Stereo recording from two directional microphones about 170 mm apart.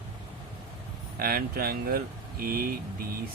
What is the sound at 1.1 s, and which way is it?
Speech, 60° right (ahead or behind).